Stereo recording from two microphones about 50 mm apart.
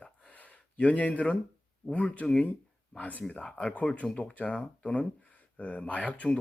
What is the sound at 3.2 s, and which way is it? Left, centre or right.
Speech, centre.